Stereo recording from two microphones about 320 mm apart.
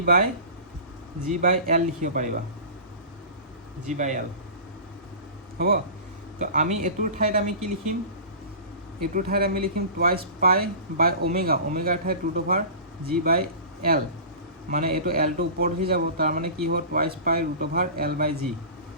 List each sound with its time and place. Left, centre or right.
0.0 s a man's voice: right
1.3 s a man's voice: right
3.8 s a man's voice: right
5.5 s a man's voice: right
9.1 s a man's voice: right
14.7 s a man's voice: right